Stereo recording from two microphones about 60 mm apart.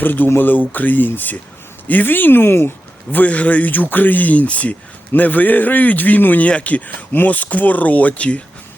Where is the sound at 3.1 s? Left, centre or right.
Left.